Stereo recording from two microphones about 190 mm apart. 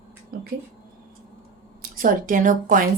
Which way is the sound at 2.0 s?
45° right (ahead or behind).